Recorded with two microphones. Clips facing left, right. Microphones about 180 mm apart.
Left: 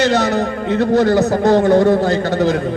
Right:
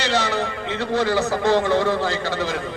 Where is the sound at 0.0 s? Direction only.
45° left (ahead or behind).